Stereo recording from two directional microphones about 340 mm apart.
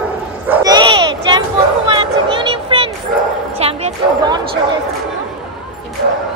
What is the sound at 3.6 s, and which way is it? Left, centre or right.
Bow-wow, centre.